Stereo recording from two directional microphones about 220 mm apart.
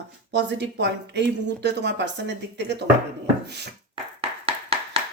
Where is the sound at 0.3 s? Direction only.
50° right (ahead or behind).